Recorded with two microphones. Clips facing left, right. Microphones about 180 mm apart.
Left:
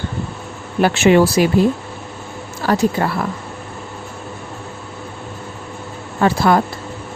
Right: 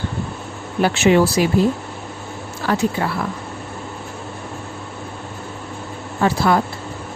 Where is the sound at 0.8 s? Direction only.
60° left (ahead or behind).